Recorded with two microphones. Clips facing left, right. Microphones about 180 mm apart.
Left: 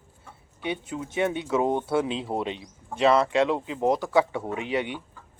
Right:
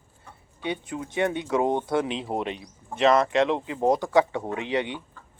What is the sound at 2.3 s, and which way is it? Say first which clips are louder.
Speech: right 1 dB; 10° right (ahead or behind).